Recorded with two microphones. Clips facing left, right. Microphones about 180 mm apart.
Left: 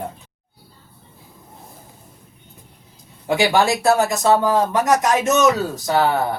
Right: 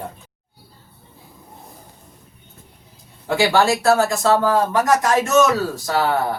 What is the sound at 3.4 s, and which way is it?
Speech, 20° left (ahead or behind).